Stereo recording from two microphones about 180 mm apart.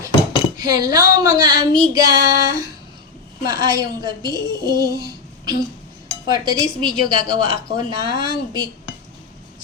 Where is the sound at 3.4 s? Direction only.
25° right (ahead or behind).